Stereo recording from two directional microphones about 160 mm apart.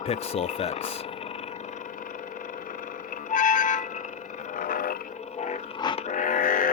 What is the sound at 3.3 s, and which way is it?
Music, 55° left (ahead or behind).